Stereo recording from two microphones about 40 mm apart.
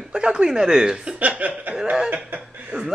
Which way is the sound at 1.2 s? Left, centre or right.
Right.